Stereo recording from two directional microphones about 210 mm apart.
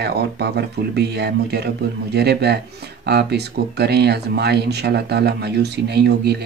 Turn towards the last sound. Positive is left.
turn(degrees=-50)  # may be behind; listen again after turning